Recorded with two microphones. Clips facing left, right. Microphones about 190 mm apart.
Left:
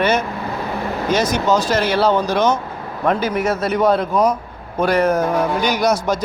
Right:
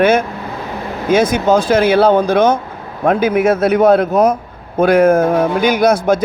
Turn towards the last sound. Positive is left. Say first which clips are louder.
# right 5 dB
turn(degrees=-55)  # may be behind; listen again after turning